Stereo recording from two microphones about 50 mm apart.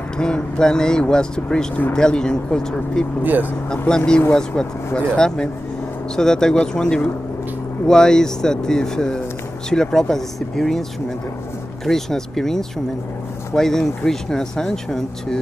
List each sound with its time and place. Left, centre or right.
0.2 s speech: centre
3.3 s speech: right
3.7 s speech: left